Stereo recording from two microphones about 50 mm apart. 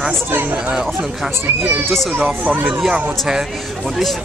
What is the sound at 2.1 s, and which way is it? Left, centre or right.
Speech, right.